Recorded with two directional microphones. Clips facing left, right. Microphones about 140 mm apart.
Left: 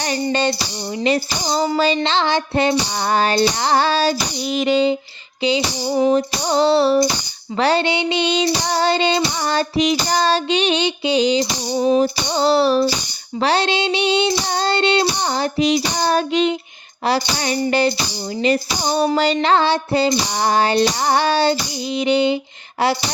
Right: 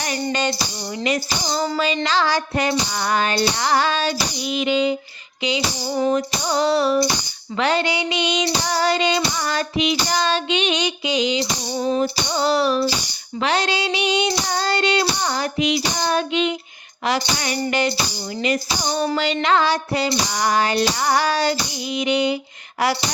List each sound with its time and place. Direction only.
0.0 s child singing: 30° left (ahead or behind)
5.4 s music: 30° left (ahead or behind)
6.1 s child singing: 30° left (ahead or behind)